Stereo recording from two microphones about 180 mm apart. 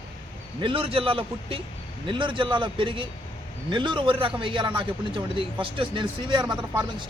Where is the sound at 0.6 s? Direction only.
30° right (ahead or behind).